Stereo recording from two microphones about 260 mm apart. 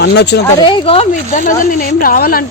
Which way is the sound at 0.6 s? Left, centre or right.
Centre.